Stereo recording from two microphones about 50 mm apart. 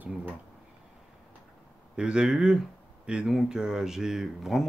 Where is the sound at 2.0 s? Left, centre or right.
Centre.